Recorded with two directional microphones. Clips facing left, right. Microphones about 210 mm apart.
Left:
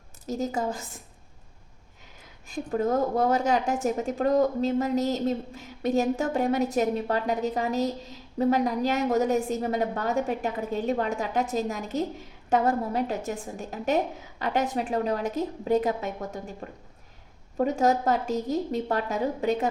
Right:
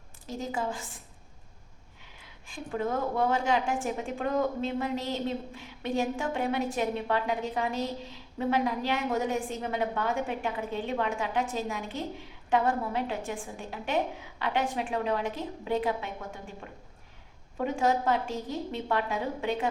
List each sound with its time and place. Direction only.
0.3 s a woman's voice: 40° left (ahead or behind)
2.5 s a woman's voice: 40° left (ahead or behind)